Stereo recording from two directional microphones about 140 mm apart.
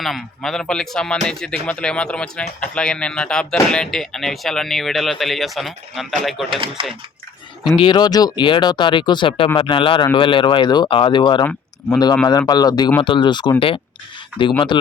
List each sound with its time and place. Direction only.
0.0 s speech: centre (ahead or behind)
6.5 s speech: 35° right (ahead or behind)
7.8 s speech: 30° left (ahead or behind)
14.7 s speech: 35° left (ahead or behind)